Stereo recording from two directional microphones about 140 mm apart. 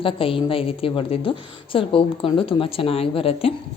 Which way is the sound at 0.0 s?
40° left (ahead or behind).